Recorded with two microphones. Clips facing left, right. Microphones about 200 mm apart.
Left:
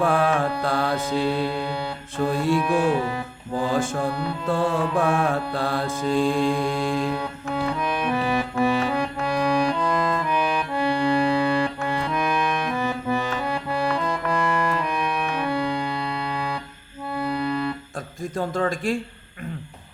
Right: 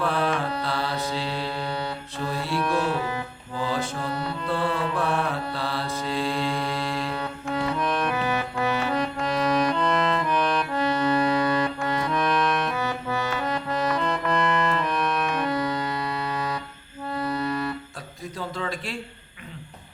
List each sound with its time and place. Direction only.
0.0 s music: 45° left (ahead or behind)
1.1 s mantra: 10° left (ahead or behind)
2.3 s music: 50° left (ahead or behind)
2.6 s music: 10° left (ahead or behind)
3.6 s music: 50° left (ahead or behind)
4.1 s music: 10° left (ahead or behind)
4.4 s music: 45° left (ahead or behind)
6.3 s music: 10° left (ahead or behind)
17.1 s clarinet: 10° left (ahead or behind)
18.3 s a man's voice: 45° left (ahead or behind)